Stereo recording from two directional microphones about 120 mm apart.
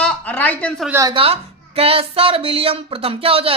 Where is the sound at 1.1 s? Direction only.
50° right (ahead or behind).